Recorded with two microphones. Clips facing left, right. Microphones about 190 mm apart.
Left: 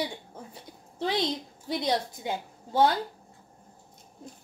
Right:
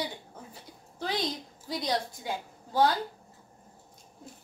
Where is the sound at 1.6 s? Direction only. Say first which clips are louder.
Left 3 dB; 25° left (ahead or behind).